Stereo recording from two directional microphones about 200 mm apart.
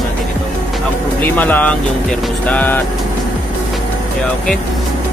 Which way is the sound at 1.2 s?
10° left (ahead or behind).